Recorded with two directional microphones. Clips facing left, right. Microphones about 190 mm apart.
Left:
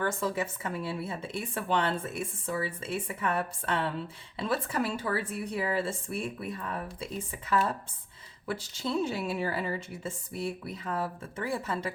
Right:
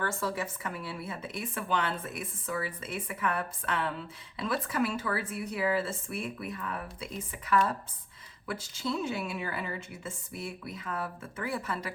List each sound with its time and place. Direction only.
0.0 s a woman's voice: 20° left (ahead or behind)